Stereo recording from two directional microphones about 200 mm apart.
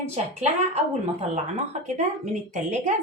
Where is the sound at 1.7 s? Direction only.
35° right (ahead or behind).